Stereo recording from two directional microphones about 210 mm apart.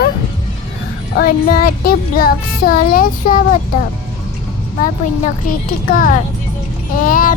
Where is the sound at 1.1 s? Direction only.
45° left (ahead or behind).